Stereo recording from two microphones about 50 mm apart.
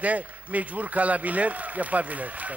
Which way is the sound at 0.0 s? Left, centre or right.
Right.